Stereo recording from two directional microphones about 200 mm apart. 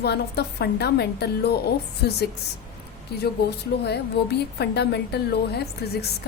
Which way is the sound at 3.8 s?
55° left (ahead or behind).